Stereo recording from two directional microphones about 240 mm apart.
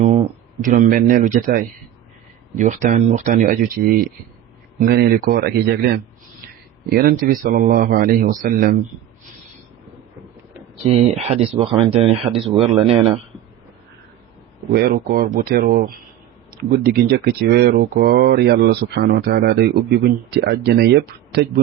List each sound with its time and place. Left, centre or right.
0.0 s speech: right
10.8 s speech: right
14.7 s speech: right